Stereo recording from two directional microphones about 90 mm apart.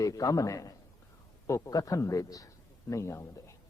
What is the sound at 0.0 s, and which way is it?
A man's voice, 40° left (ahead or behind).